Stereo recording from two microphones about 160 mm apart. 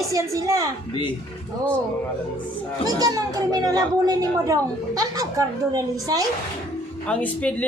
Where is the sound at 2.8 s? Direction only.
25° right (ahead or behind).